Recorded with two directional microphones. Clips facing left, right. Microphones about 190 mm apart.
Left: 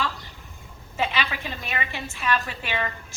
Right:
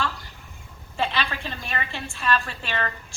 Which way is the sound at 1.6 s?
5° left (ahead or behind).